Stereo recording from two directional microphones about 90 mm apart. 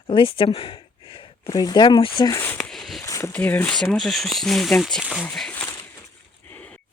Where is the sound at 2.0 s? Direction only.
75° left (ahead or behind).